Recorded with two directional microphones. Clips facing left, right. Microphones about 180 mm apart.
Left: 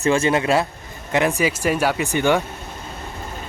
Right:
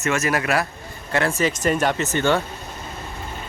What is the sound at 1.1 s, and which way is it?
Speech, 15° left (ahead or behind).